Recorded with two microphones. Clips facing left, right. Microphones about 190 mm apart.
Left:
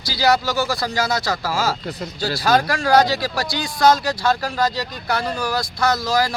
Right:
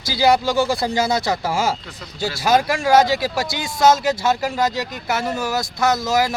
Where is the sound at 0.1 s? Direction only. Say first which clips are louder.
Right 2 dB; 20° right (ahead or behind).